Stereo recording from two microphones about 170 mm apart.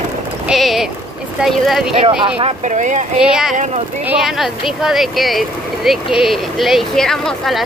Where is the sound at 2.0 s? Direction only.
30° right (ahead or behind).